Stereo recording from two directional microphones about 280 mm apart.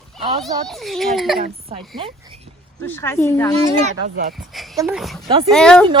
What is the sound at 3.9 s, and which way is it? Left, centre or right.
Speech, right.